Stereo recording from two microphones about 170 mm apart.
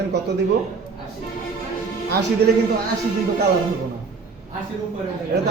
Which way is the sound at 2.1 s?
75° right (ahead or behind).